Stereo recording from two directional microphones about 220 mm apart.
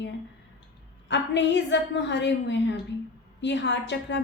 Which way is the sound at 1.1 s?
55° left (ahead or behind).